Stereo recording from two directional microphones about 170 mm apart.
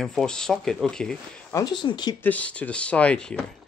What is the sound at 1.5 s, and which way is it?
Speech, 25° left (ahead or behind).